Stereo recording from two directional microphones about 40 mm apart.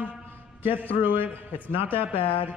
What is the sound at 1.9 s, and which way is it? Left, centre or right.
Speech, right.